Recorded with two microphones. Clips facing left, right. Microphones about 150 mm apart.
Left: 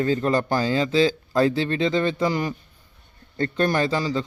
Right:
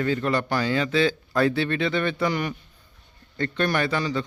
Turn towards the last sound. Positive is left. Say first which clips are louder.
# left 2 dB
turn(degrees=30)  # may be behind; listen again after turning